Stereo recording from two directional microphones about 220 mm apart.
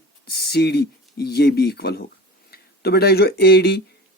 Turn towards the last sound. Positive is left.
turn(degrees=45)  # may be behind; listen again after turning